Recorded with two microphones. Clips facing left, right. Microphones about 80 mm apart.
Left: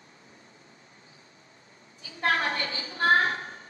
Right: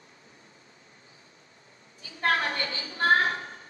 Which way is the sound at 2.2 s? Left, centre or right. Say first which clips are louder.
Even; left.